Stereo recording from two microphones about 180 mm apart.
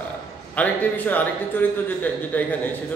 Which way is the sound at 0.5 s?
10° left (ahead or behind).